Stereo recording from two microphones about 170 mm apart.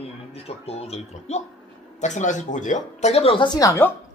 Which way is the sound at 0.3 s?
35° left (ahead or behind).